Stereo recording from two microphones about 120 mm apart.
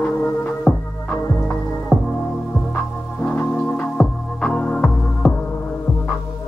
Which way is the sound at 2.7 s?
15° left (ahead or behind).